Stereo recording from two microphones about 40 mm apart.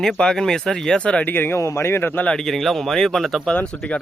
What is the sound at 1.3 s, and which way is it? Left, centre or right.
Speech, left.